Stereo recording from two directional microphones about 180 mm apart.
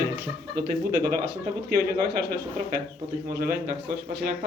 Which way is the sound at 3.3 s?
55° right (ahead or behind).